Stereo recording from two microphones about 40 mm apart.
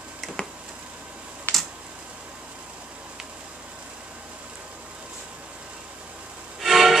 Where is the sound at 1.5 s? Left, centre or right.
Left.